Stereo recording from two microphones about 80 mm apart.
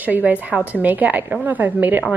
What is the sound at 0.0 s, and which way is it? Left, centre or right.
A woman's voice, right.